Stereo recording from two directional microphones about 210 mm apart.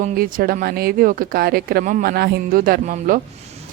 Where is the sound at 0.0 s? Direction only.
40° right (ahead or behind).